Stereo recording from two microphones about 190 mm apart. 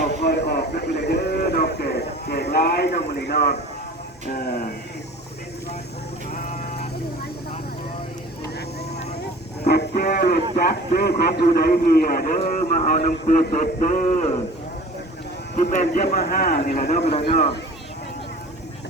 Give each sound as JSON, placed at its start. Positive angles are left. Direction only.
{"t": 0.1, "sound": "a sound", "side_deg": 60}
{"t": 2.3, "sound": "speech", "side_deg": 55}
{"t": 9.6, "sound": "music", "side_deg": 55}
{"t": 10.5, "sound": "a sound", "side_deg": 50}
{"t": 12.5, "sound": "speech", "side_deg": 45}
{"t": 15.5, "sound": "speech", "side_deg": 40}
{"t": 16.8, "sound": "speech", "side_deg": 35}